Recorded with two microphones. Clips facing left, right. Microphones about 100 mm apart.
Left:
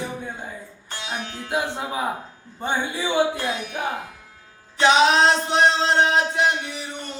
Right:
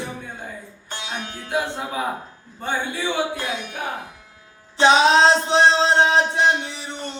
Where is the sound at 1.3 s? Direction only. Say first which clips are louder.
Right 1 dB; 20° left (ahead or behind).